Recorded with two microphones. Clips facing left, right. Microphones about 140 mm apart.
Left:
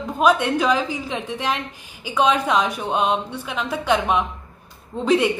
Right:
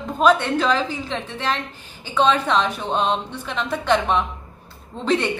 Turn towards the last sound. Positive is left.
turn(degrees=10)  # may be behind; listen again after turning